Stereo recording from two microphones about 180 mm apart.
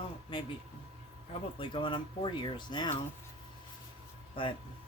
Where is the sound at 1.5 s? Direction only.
30° left (ahead or behind).